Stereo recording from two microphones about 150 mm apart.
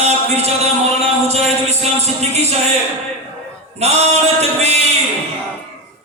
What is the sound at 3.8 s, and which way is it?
Music, 45° right (ahead or behind).